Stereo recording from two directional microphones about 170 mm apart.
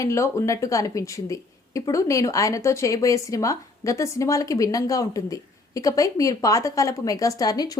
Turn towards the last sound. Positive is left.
turn(degrees=20)  # may be behind; listen again after turning